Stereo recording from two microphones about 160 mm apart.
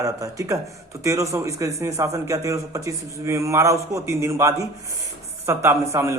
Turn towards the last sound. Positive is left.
turn(degrees=-20)  # may be behind; listen again after turning